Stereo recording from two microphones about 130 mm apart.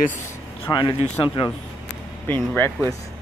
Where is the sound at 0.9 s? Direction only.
45° left (ahead or behind).